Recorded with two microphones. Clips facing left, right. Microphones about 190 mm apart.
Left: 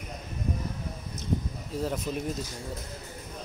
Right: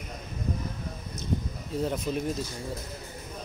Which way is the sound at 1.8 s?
Centre (ahead or behind).